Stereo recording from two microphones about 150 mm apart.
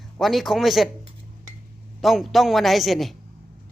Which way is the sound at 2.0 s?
Centre (ahead or behind).